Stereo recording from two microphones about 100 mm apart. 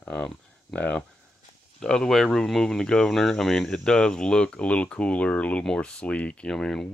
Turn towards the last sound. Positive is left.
turn(degrees=5)  # may be behind; listen again after turning